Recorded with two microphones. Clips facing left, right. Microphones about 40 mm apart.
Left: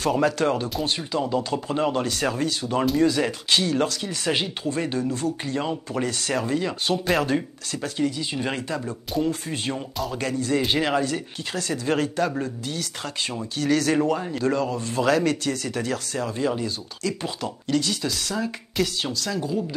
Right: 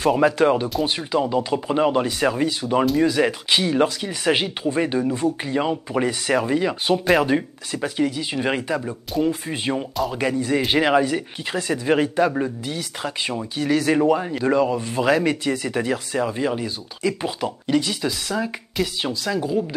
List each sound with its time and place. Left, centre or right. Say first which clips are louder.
0.0 s speech: right 4 dB; centre